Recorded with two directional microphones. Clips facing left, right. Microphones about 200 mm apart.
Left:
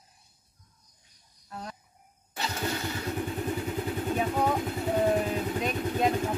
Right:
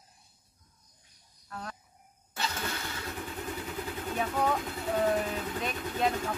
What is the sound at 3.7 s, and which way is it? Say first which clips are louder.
Vehicle: left 2 dB; 20° left (ahead or behind).